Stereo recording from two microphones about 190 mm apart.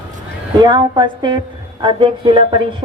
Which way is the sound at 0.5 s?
20° right (ahead or behind).